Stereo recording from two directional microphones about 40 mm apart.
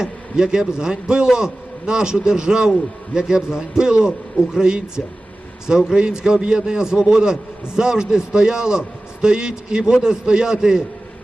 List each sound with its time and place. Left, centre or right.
0.0 s a man's voice: centre